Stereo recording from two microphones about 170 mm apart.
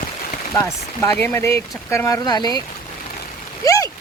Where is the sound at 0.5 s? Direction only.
15° left (ahead or behind).